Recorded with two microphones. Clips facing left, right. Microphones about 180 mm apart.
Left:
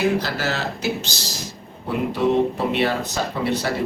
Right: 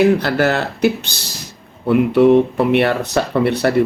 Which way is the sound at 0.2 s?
60° right (ahead or behind).